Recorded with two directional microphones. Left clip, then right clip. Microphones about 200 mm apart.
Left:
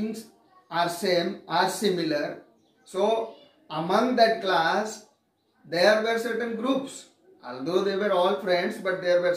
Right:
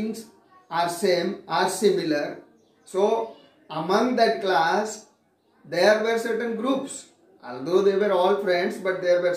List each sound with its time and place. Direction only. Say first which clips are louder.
0.7 s a man's voice: right 2 dB; 5° right (ahead or behind)